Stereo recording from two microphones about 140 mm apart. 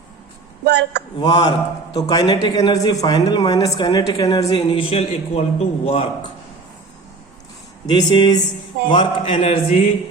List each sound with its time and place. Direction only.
1.2 s a man's voice: 30° left (ahead or behind)
4.7 s a man's voice: 40° left (ahead or behind)
7.9 s mantra: 35° left (ahead or behind)